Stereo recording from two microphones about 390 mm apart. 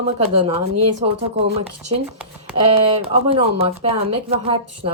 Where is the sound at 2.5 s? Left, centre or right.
Centre.